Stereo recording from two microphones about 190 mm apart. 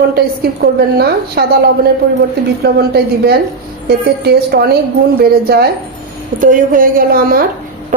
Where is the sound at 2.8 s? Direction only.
55° right (ahead or behind).